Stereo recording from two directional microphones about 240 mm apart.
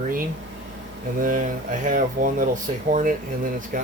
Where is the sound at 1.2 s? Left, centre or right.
Right.